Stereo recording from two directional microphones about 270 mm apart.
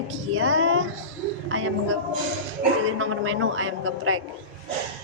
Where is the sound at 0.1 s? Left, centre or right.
Right.